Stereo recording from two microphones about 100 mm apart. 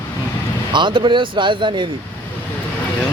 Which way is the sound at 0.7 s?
55° right (ahead or behind).